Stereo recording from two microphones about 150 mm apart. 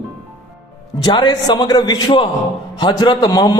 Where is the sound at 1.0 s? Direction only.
30° left (ahead or behind).